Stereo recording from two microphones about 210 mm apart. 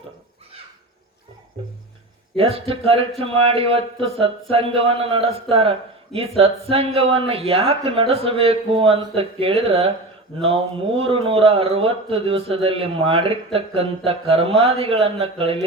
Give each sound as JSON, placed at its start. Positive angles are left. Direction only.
{"t": 2.3, "sound": "a man's voice", "side_deg": -25}